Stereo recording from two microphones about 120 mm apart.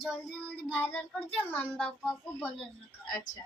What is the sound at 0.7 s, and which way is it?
Speech, 10° left (ahead or behind).